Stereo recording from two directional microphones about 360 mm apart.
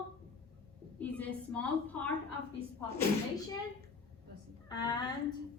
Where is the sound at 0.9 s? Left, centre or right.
Centre.